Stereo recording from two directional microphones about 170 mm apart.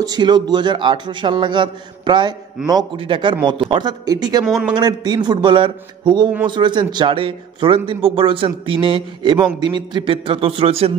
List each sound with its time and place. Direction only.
0.0 s a man's voice: 25° right (ahead or behind)
4.5 s speech: centre (ahead or behind)
4.7 s a man's voice: 25° right (ahead or behind)